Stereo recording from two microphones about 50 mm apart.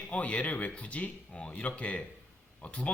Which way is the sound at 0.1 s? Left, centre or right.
Left.